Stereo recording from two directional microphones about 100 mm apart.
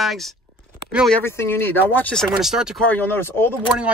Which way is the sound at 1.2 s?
25° left (ahead or behind).